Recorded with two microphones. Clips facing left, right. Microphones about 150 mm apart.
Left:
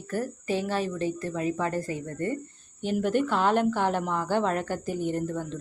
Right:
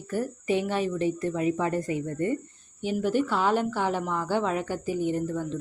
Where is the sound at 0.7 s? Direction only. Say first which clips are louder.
Right 2 dB; 15° right (ahead or behind).